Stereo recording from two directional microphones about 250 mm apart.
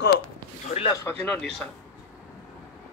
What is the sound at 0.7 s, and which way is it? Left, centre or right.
Speech, left.